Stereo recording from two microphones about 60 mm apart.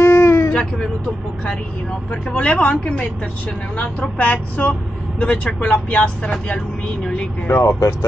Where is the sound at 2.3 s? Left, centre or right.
Centre.